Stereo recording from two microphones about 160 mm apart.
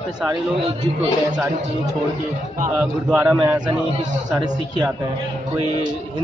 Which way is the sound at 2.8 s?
10° right (ahead or behind).